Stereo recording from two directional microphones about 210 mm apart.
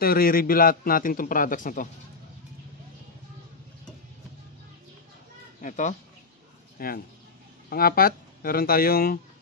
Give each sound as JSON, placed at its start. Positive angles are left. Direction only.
{"t": 0.0, "sound": "a man's voice", "side_deg": 45}
{"t": 5.6, "sound": "a man's voice", "side_deg": 35}